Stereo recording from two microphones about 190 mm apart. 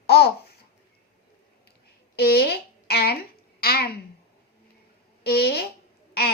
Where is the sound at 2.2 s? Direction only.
55° left (ahead or behind).